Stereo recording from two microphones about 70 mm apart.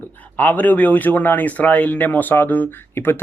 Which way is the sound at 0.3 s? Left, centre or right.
Left.